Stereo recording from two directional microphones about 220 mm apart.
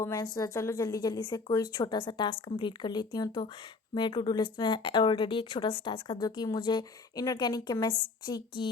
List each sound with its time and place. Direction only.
0.0 s a woman's voice: 15° left (ahead or behind)